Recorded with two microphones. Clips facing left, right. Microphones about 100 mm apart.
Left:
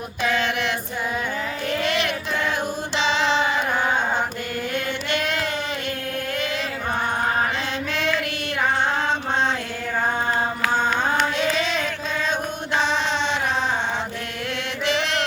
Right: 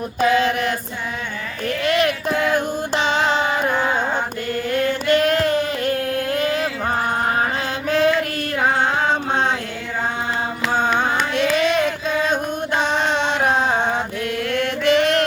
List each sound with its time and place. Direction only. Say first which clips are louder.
0.2 s mantra: right 6 dB; 40° right (ahead or behind)
1.8 s music: right 8 dB; 45° right (ahead or behind)
5.0 s a sound: right 11 dB; 45° right (ahead or behind)
7.9 s female singing: right 11 dB; 40° right (ahead or behind)
11.3 s child singing: right 5 dB; 55° right (ahead or behind)
12.3 s music: right 4 dB; 50° right (ahead or behind)
14.5 s chant: right 7 dB; 50° right (ahead or behind)